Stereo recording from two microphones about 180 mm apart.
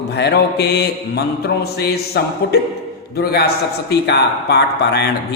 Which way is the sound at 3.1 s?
60° left (ahead or behind).